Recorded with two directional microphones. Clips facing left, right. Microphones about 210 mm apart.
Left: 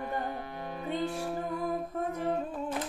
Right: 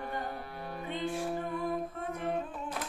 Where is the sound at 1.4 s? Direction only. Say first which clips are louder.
Left 1 dB; 40° left (ahead or behind).